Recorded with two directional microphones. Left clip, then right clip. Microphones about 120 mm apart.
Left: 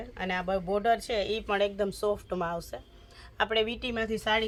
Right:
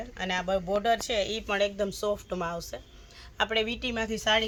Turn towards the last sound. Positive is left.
turn(degrees=15)  # may be behind; listen again after turning